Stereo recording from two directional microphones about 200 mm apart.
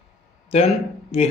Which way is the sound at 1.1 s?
30° left (ahead or behind).